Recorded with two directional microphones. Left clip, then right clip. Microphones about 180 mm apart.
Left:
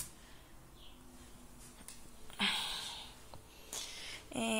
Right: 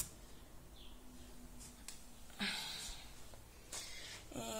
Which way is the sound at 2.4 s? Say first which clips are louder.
Left 7 dB; 10° left (ahead or behind).